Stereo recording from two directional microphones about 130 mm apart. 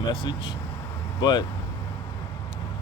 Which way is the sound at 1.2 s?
35° left (ahead or behind).